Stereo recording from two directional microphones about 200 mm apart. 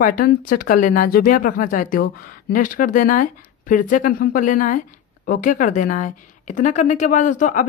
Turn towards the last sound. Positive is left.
turn(degrees=40)  # may be behind; listen again after turning